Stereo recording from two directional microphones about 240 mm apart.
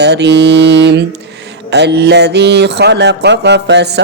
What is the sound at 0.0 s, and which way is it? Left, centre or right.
Speech, right.